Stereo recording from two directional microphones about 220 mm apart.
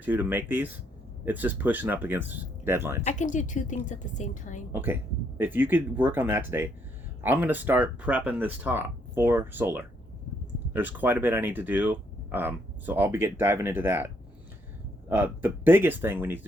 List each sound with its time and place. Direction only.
0.0 s speech: 10° right (ahead or behind)
3.0 s a woman's voice: 30° left (ahead or behind)
4.7 s speech: 10° right (ahead or behind)
15.1 s speech: 10° right (ahead or behind)